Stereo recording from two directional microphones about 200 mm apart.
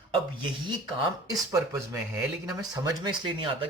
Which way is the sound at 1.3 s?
15° right (ahead or behind).